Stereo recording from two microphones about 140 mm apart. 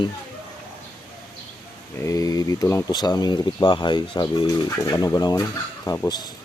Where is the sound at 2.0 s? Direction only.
25° left (ahead or behind).